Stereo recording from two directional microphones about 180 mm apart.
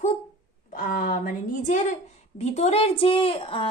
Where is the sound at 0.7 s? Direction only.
50° left (ahead or behind).